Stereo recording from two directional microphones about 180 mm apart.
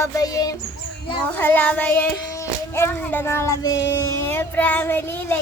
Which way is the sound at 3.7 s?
90° left.